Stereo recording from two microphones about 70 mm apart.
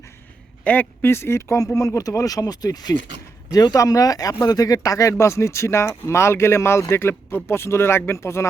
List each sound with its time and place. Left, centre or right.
0.6 s a man's voice: left
1.0 s speech: left